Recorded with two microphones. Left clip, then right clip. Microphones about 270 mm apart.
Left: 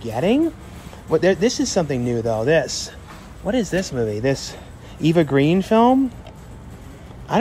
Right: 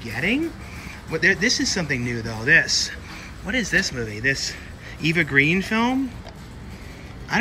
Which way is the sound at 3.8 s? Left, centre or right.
Centre.